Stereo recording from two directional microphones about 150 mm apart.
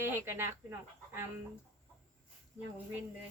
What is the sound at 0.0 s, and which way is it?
Speech, 15° right (ahead or behind).